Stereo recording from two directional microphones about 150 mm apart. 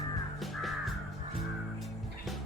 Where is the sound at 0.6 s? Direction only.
Centre (ahead or behind).